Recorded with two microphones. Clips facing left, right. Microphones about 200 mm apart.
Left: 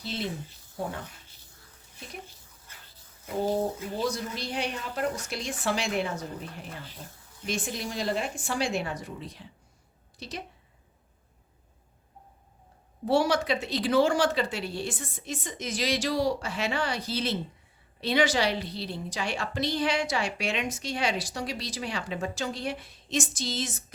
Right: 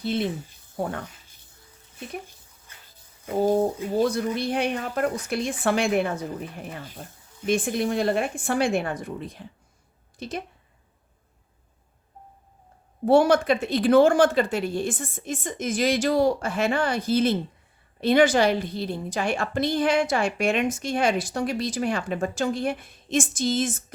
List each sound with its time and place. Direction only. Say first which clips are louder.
0.0 s speech: right 8 dB; 55° right (ahead or behind)
3.2 s speech: right 6 dB; 50° right (ahead or behind)
13.1 s a woman's voice: right 7 dB; 55° right (ahead or behind)